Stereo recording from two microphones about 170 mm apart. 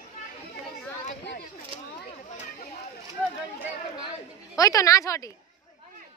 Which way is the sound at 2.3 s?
45° left (ahead or behind).